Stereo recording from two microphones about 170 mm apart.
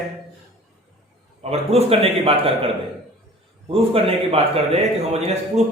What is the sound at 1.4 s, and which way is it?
A man's voice, 35° right (ahead or behind).